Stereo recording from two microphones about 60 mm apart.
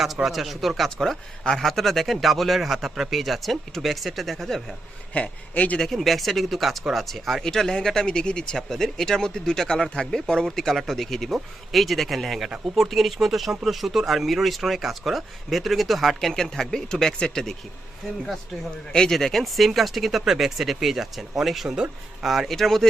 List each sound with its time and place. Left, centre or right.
0.0 s speech: centre
5.1 s speech: left
5.8 s speech: centre
18.9 s speech: centre